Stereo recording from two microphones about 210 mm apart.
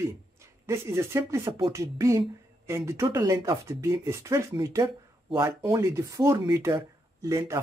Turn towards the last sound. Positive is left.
turn(degrees=-15)  # may be behind; listen again after turning